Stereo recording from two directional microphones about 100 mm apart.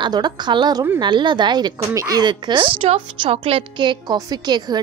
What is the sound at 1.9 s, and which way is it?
Speech, 35° right (ahead or behind).